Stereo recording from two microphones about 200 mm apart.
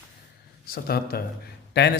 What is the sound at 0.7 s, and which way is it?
A man's voice, 50° left (ahead or behind).